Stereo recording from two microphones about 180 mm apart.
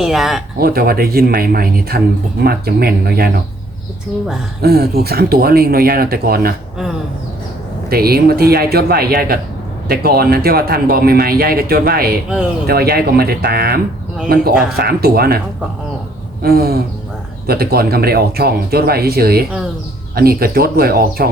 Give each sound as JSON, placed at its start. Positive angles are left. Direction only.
{"t": 0.0, "sound": "speech", "side_deg": 0}
{"t": 0.6, "sound": "speech", "side_deg": -60}
{"t": 4.6, "sound": "speech", "side_deg": -60}
{"t": 7.9, "sound": "speech", "side_deg": -60}
{"t": 14.8, "sound": "speech", "side_deg": -60}
{"t": 16.4, "sound": "speech", "side_deg": -55}